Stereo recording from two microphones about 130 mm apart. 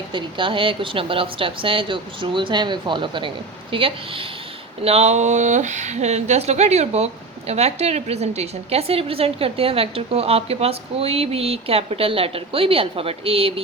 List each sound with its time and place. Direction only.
0.1 s speech: 40° right (ahead or behind)